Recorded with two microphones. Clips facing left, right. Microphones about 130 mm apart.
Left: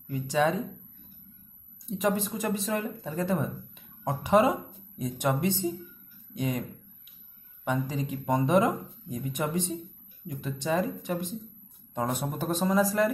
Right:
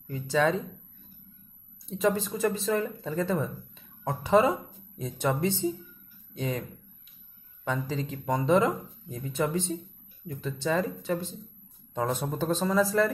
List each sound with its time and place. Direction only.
0.1 s speech: 15° left (ahead or behind)
1.9 s speech: 15° left (ahead or behind)
7.6 s speech: 15° left (ahead or behind)